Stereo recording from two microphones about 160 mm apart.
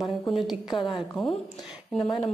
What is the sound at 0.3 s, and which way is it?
Speech, centre (ahead or behind).